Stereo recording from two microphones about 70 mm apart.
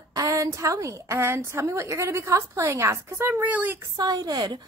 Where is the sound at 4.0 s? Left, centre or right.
Right.